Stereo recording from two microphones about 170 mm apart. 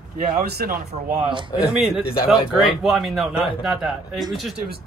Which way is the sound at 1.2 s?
30° right (ahead or behind).